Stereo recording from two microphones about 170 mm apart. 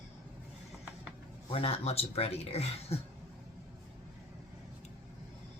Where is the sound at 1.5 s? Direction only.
35° left (ahead or behind).